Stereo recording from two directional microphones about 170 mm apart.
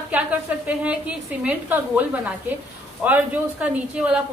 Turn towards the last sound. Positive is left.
turn(degrees=-5)  # may be behind; listen again after turning